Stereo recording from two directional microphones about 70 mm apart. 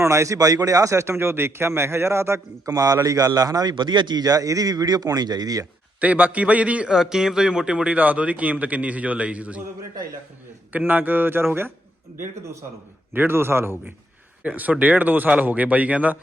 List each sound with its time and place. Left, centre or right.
0.0 s speech: right
0.3 s a man's voice: right
2.6 s a man's voice: right
6.0 s speech: right
6.9 s speech: centre
10.7 s a man's voice: right
14.4 s speech: right